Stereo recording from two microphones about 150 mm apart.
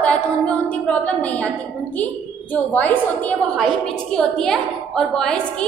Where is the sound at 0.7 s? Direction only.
10° left (ahead or behind).